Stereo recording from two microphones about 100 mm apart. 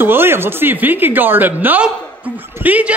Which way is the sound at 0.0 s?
20° right (ahead or behind).